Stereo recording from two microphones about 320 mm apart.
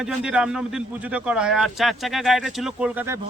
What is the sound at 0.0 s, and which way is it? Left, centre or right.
Speech, centre.